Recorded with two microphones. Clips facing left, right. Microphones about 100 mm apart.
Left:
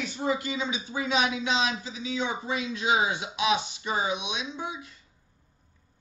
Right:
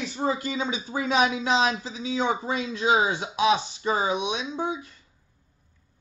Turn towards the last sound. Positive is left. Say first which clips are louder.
# right 5 dB
turn(degrees=-40)  # may be behind; listen again after turning